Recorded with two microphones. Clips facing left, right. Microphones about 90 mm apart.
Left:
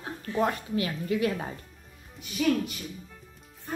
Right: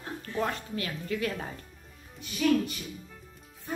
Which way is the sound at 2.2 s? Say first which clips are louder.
Even; 5° left (ahead or behind).